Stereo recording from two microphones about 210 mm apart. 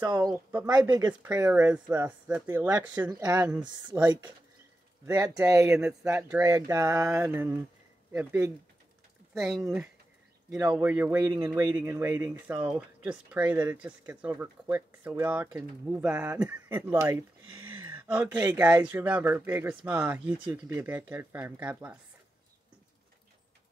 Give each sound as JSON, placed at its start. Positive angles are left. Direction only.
{"t": 0.0, "sound": "speech", "side_deg": -20}
{"t": 4.0, "sound": "speech", "side_deg": -20}
{"t": 10.5, "sound": "speech", "side_deg": -5}